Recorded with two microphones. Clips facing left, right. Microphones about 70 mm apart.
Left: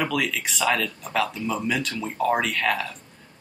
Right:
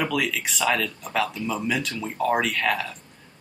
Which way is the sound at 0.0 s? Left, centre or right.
Centre.